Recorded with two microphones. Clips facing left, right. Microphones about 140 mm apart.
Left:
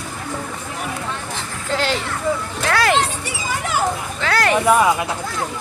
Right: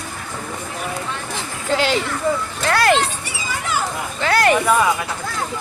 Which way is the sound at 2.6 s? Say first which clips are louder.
Right 2 dB; centre (ahead or behind).